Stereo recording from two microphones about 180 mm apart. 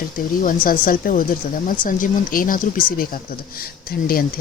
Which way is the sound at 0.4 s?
50° left (ahead or behind).